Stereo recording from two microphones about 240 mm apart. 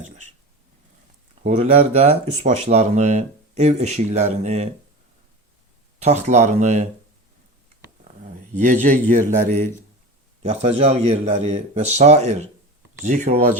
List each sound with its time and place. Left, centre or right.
1.5 s speech: right
6.0 s speech: right
8.5 s a man's voice: right